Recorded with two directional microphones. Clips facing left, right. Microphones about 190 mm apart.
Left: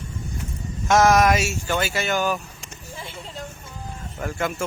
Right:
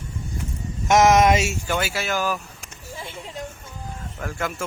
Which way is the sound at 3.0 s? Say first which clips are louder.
Right 1 dB; 15° right (ahead or behind).